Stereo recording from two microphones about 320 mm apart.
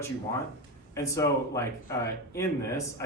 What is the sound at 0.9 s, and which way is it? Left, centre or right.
Speech, centre.